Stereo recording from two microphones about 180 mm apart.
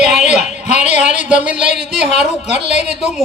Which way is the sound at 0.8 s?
5° right (ahead or behind).